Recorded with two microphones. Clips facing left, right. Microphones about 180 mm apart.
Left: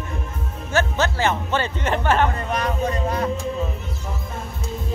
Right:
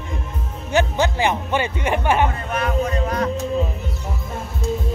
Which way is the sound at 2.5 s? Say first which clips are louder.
Right 1 dB; 35° left (ahead or behind).